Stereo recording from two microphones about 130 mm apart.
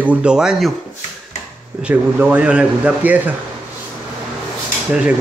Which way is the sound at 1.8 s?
15° right (ahead or behind).